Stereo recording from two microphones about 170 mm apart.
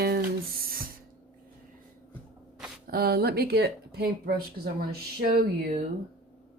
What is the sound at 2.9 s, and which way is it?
Speech, 65° right (ahead or behind).